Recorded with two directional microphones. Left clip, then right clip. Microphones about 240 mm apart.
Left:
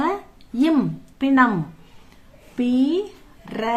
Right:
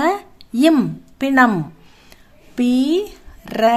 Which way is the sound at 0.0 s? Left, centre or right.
Right.